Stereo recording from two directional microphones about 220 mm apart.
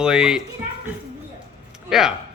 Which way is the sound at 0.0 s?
5° right (ahead or behind).